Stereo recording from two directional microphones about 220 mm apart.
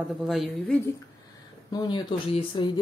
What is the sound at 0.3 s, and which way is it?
Speech, centre (ahead or behind).